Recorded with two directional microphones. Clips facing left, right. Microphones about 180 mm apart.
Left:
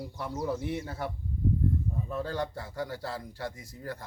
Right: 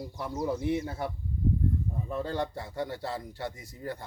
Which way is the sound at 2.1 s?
20° right (ahead or behind).